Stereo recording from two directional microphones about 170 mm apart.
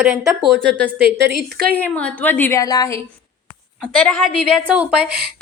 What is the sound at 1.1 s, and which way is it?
Speech, 85° right.